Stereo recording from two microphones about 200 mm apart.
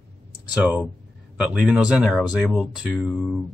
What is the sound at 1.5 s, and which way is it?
Speech, 5° right (ahead or behind).